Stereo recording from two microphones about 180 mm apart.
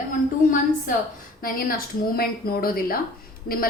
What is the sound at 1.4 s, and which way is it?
A woman's voice, 55° left (ahead or behind).